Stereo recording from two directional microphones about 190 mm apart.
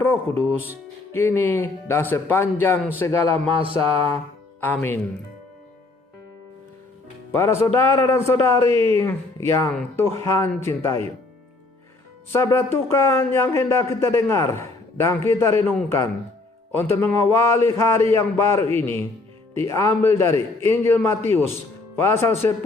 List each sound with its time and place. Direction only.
1.1 s a man's voice: 10° left (ahead or behind)
3.6 s mantra: 30° right (ahead or behind)
4.6 s a man's voice: 10° left (ahead or behind)
7.8 s a man's voice: 15° left (ahead or behind)
12.3 s a man's voice: 15° left (ahead or behind)